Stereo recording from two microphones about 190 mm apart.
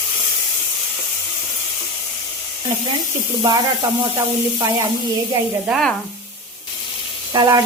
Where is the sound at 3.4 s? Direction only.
20° right (ahead or behind).